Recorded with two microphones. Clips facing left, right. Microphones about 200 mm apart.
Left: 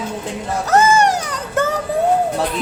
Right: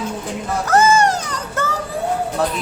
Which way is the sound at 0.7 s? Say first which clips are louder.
Left 1 dB; 20° left (ahead or behind).